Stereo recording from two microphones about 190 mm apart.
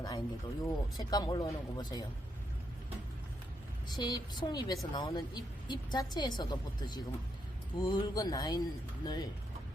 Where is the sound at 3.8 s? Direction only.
20° left (ahead or behind).